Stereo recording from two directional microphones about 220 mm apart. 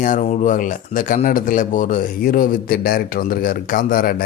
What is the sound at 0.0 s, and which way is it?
A man's voice, 35° left (ahead or behind).